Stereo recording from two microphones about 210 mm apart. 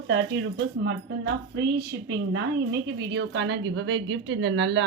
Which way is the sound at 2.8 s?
55° right (ahead or behind).